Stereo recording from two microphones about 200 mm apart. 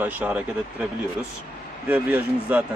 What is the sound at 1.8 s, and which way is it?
Speech, 10° right (ahead or behind).